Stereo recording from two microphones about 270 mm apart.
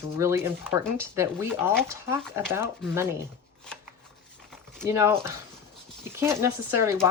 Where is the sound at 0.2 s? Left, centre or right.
Centre.